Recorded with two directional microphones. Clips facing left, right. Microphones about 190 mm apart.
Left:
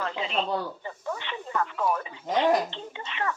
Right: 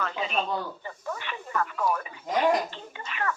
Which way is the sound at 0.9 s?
15° left (ahead or behind).